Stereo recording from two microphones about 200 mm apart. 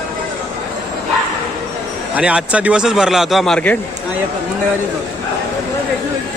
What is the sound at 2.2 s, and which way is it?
Speech, 5° right (ahead or behind).